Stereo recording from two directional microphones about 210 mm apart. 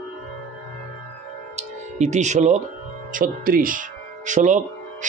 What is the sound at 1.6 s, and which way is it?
Music, 35° right (ahead or behind).